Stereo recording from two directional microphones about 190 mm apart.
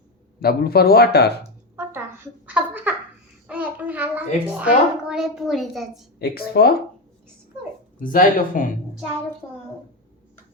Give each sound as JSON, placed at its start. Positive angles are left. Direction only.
{"t": 0.3, "sound": "speech", "side_deg": 55}
{"t": 1.7, "sound": "a sound", "side_deg": -15}
{"t": 2.5, "sound": "giggle", "side_deg": -10}
{"t": 3.4, "sound": "a child's voice", "side_deg": -5}
{"t": 6.1, "sound": "speech", "side_deg": 55}
{"t": 7.9, "sound": "speech", "side_deg": 45}
{"t": 9.4, "sound": "a child's voice", "side_deg": 10}